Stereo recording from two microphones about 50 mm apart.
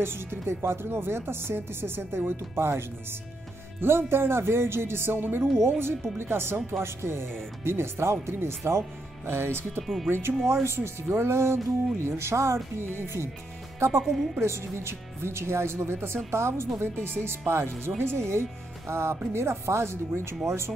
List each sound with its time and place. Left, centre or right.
0.0 s speech: right
14.0 s speech: centre
14.4 s speech: right